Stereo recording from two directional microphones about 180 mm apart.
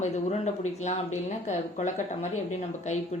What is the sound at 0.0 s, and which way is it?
Speech, 40° left (ahead or behind).